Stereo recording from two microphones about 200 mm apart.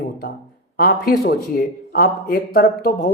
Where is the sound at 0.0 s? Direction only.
50° left (ahead or behind).